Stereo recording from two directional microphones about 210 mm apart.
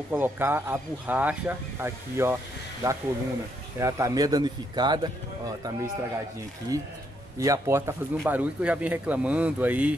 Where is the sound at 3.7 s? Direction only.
15° right (ahead or behind).